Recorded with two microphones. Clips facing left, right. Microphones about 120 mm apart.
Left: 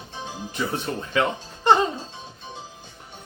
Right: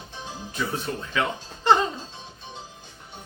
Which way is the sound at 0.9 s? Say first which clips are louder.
Left 2 dB; 40° left (ahead or behind).